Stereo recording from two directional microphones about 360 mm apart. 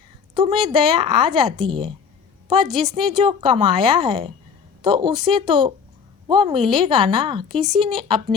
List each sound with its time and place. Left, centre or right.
0.3 s a woman's voice: centre